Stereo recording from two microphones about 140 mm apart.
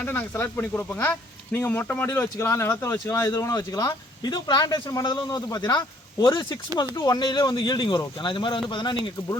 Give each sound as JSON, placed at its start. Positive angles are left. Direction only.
{"t": 0.0, "sound": "speech", "side_deg": 15}